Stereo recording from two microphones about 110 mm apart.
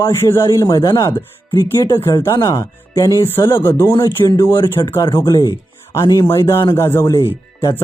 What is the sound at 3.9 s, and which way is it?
A man's voice, 40° left (ahead or behind).